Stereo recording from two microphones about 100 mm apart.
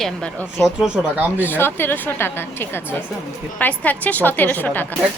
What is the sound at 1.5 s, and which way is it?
A woman's voice, 20° left (ahead or behind).